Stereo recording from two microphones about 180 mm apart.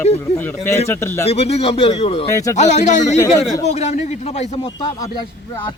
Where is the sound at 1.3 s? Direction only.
35° left (ahead or behind).